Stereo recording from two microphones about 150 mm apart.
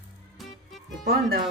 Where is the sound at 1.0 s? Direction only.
90° right.